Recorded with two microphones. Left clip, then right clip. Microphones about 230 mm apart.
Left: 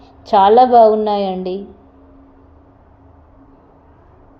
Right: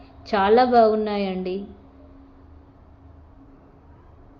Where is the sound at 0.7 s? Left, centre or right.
Left.